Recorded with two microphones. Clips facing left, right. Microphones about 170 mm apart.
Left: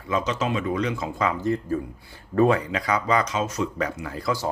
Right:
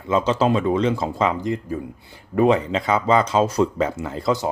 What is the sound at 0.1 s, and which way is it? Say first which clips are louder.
Speech: right 6 dB; 30° right (ahead or behind).